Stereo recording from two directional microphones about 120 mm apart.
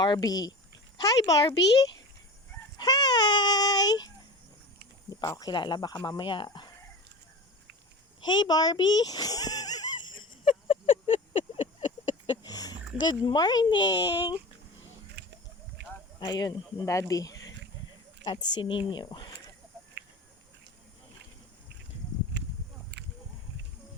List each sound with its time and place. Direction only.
0.0 s speech: 35° left (ahead or behind)
2.7 s chicken: 35° left (ahead or behind)
5.2 s speech: 30° left (ahead or behind)
8.2 s a sound: 40° left (ahead or behind)
13.0 s speech: 40° left (ahead or behind)
16.2 s speech: 35° left (ahead or behind)